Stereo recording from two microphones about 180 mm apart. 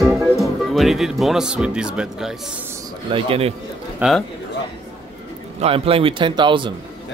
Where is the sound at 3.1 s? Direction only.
30° right (ahead or behind).